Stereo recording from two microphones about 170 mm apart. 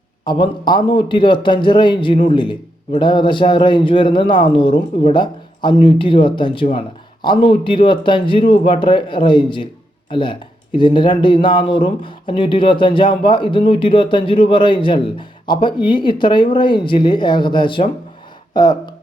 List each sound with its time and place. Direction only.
0.3 s speech: 25° left (ahead or behind)